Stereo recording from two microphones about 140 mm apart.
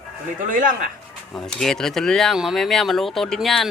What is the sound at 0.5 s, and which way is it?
Speech, 70° right (ahead or behind).